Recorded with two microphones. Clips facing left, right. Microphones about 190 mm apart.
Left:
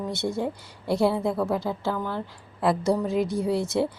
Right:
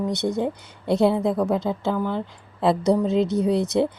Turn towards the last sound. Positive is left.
turn(degrees=-20)  # may be behind; listen again after turning